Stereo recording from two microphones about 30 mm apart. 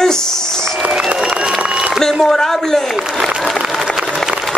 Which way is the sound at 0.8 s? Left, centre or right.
Right.